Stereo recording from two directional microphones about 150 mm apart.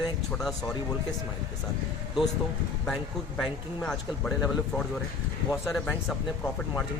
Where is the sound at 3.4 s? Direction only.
Centre (ahead or behind).